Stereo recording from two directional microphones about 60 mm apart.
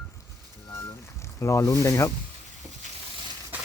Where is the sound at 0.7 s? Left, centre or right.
Left.